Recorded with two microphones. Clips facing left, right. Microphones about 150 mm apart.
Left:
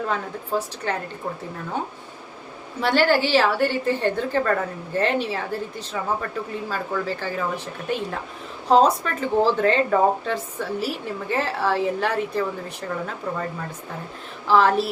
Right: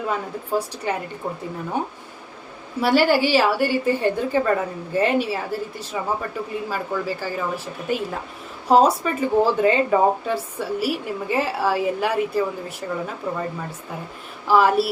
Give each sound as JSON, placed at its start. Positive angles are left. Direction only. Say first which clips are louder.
{"t": 0.1, "sound": "speech", "louder": "right 1 dB", "side_deg": -10}
{"t": 2.8, "sound": "speech", "louder": "right 2 dB", "side_deg": -10}